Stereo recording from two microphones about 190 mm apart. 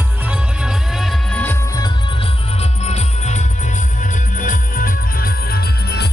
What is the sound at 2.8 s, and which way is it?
Music, 35° left (ahead or behind).